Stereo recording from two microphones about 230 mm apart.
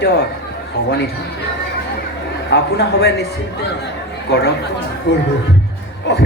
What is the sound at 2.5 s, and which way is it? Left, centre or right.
Speech, left.